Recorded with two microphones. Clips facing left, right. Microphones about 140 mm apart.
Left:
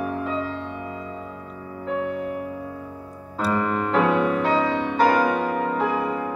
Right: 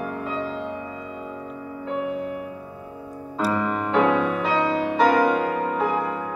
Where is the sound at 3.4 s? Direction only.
Centre (ahead or behind).